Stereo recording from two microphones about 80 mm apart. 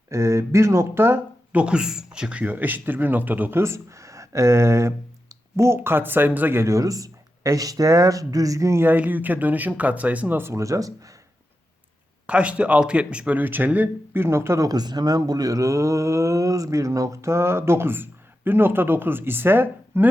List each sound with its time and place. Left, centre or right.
0.1 s speech: right
1.5 s speech: centre
3.6 s speech: right
10.5 s speech: right
12.2 s a man's voice: centre; by 14.7 s right
14.7 s speech: right